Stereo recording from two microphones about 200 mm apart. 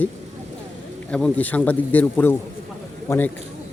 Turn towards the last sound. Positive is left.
turn(degrees=10)  # may be behind; listen again after turning